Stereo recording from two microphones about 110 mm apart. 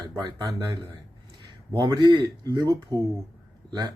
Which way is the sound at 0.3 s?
35° right (ahead or behind).